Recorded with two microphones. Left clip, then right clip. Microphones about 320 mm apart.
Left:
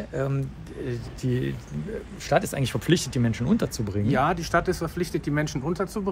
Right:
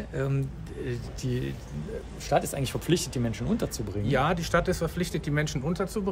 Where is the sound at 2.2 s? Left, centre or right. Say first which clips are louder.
Left 3 dB; left.